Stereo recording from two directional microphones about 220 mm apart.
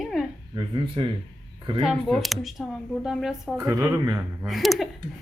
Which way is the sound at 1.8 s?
Centre (ahead or behind).